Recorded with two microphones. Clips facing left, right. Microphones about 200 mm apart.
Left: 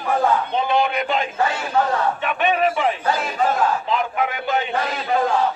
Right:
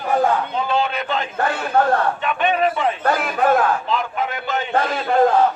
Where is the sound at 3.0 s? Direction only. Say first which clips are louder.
Right 3 dB; 60° right (ahead or behind).